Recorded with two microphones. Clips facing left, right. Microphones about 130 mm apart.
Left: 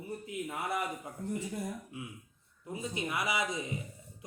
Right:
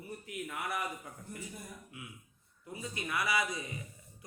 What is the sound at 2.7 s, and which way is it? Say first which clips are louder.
Speech: left 3 dB; 20° left (ahead or behind).